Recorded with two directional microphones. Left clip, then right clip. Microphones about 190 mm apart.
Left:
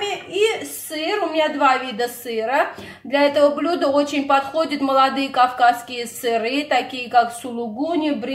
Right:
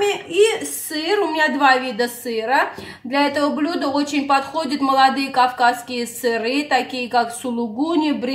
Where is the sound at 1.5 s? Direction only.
Centre (ahead or behind).